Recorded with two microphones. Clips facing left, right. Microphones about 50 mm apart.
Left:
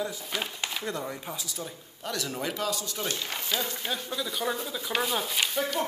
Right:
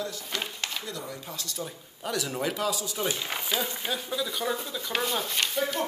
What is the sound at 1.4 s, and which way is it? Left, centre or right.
Speech, centre.